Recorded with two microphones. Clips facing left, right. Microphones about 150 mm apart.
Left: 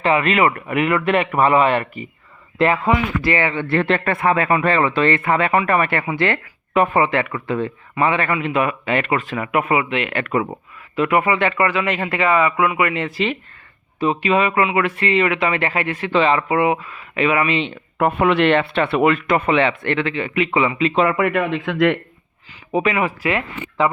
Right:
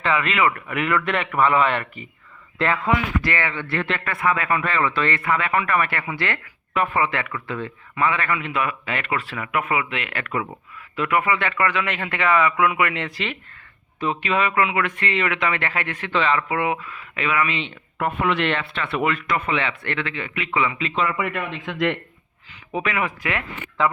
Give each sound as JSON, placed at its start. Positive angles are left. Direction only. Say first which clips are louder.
{"t": 0.3, "sound": "speech", "louder": "left 4 dB", "side_deg": 40}
{"t": 0.7, "sound": "speech", "louder": "left 5 dB", "side_deg": 20}
{"t": 3.3, "sound": "speech", "louder": "left 6 dB", "side_deg": 20}
{"t": 3.8, "sound": "speech", "louder": "left 8 dB", "side_deg": 35}
{"t": 10.2, "sound": "speech", "louder": "left 6 dB", "side_deg": 40}
{"t": 11.3, "sound": "speech", "louder": "left 4 dB", "side_deg": 15}
{"t": 16.7, "sound": "speech", "louder": "left 6 dB", "side_deg": 35}
{"t": 17.9, "sound": "speech", "louder": "left 6 dB", "side_deg": 55}
{"t": 19.5, "sound": "speech", "louder": "left 8 dB", "side_deg": 25}
{"t": 20.9, "sound": "speech", "louder": "left 7 dB", "side_deg": 55}
{"t": 22.7, "sound": "speech", "louder": "left 6 dB", "side_deg": 30}
{"t": 23.0, "sound": "speech", "louder": "left 6 dB", "side_deg": 10}